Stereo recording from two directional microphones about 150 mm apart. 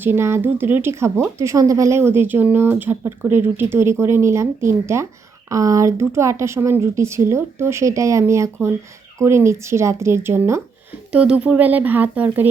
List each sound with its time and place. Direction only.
0.0 s speech: 15° right (ahead or behind)